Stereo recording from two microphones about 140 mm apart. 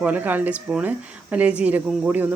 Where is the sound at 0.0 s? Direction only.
10° right (ahead or behind).